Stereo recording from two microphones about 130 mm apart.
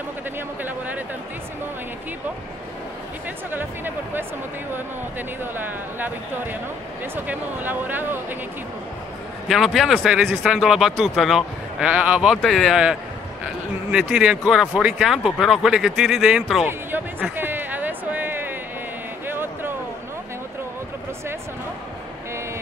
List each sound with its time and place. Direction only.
0.7 s a sound: 15° right (ahead or behind)
3.5 s speech: 15° right (ahead or behind)
5.4 s speech: 15° right (ahead or behind)
9.5 s speech: centre (ahead or behind)
13.9 s speech: 5° right (ahead or behind)
16.6 s a sound: 15° right (ahead or behind)